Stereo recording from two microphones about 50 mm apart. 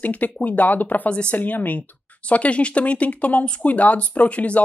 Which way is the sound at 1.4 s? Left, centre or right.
Left.